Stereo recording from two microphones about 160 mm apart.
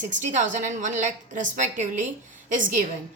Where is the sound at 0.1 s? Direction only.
50° right (ahead or behind).